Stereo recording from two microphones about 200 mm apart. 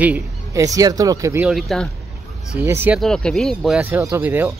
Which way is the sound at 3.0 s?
5° left (ahead or behind).